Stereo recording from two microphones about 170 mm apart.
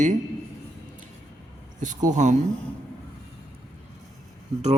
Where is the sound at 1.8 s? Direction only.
45° right (ahead or behind).